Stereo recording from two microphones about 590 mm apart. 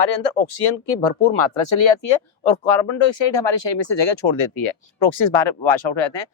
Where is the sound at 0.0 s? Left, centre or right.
Left.